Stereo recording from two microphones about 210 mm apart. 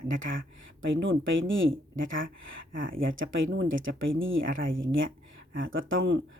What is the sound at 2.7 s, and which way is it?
Speech, 40° right (ahead or behind).